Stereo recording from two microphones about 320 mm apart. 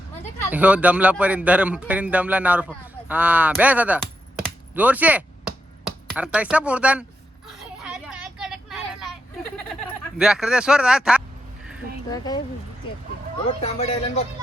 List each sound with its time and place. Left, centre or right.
0.5 s speech: centre
4.4 s a sound: centre
6.1 s speech: centre
7.4 s vehicle: centre
12.1 s speech: centre
13.6 s speech: centre